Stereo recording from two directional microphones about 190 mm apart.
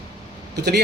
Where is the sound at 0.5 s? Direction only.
60° right (ahead or behind).